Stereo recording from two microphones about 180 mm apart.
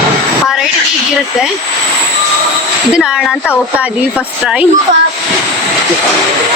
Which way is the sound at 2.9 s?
5° right (ahead or behind).